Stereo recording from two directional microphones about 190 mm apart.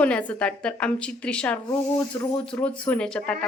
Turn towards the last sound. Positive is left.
turn(degrees=5)  # may be behind; listen again after turning